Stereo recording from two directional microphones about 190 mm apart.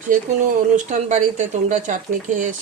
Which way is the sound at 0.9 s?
40° right (ahead or behind).